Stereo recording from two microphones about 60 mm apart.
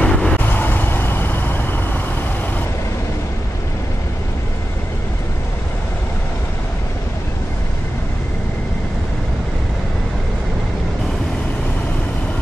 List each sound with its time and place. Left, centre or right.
0.0 s vehicle: centre
0.5 s vehicle: left